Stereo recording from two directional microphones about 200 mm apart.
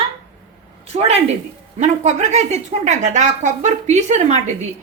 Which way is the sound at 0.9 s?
30° right (ahead or behind).